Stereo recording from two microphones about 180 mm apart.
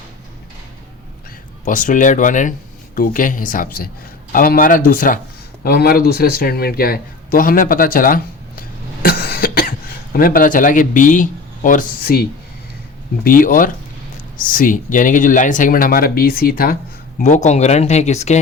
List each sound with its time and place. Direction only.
1.6 s speech: 45° left (ahead or behind)
17.2 s speech: 40° left (ahead or behind)